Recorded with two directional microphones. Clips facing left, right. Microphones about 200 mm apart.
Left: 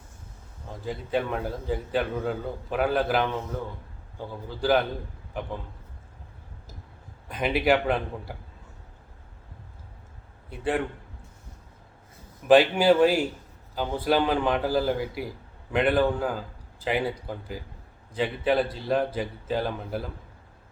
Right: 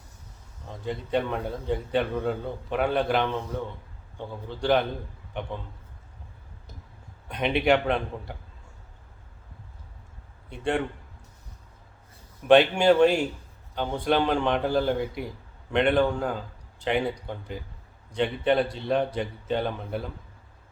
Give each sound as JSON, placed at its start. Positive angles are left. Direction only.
{"t": 0.7, "sound": "a man's voice", "side_deg": 5}
{"t": 7.3, "sound": "a man's voice", "side_deg": 0}
{"t": 10.5, "sound": "a man's voice", "side_deg": 5}
{"t": 12.5, "sound": "a man's voice", "side_deg": 0}